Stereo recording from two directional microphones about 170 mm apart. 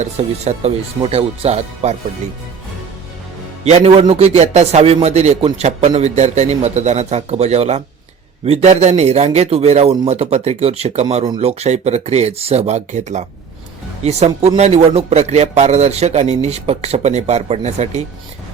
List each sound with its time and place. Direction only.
0.0 s speech: 40° right (ahead or behind)
3.6 s speech: 40° right (ahead or behind)